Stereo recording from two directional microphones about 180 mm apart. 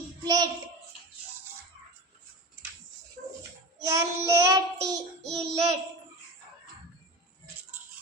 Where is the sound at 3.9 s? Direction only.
15° right (ahead or behind).